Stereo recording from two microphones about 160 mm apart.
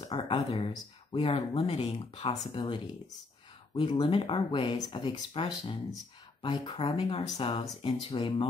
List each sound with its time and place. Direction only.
0.0 s speech: 30° left (ahead or behind)